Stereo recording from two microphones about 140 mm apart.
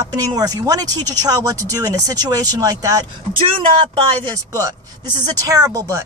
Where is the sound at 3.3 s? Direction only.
40° right (ahead or behind).